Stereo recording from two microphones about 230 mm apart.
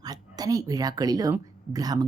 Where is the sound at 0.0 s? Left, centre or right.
Centre.